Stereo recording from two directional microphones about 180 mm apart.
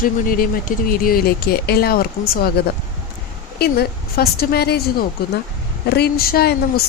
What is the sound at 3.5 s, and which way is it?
Speech, 60° left (ahead or behind).